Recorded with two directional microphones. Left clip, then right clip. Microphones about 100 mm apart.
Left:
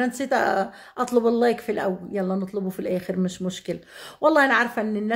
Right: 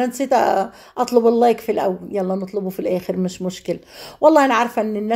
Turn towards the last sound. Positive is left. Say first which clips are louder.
# right 5 dB
turn(degrees=-20)  # may be behind; listen again after turning